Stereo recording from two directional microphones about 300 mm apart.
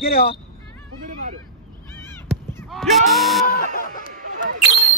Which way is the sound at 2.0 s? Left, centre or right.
Centre.